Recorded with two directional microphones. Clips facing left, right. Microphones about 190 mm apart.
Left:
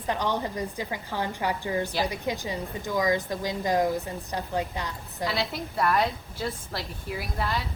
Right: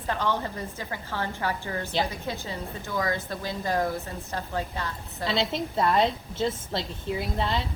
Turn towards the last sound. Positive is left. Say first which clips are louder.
# right 2 dB
turn(degrees=-25)  # may be behind; listen again after turning